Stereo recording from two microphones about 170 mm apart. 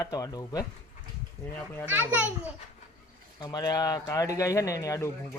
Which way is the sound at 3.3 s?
25° left (ahead or behind).